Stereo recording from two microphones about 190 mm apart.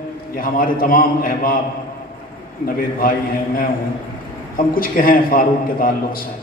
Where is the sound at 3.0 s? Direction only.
50° left (ahead or behind).